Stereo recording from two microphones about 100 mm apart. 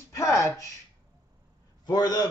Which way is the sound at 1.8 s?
40° left (ahead or behind).